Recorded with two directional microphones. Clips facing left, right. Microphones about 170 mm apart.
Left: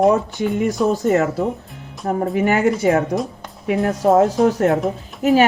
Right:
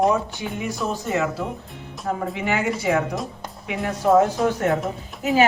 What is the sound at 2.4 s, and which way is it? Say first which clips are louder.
A woman's voice: left 10 dB; 45° left (ahead or behind).